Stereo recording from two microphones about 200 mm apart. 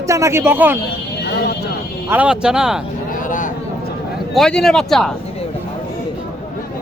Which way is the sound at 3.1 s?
40° left (ahead or behind).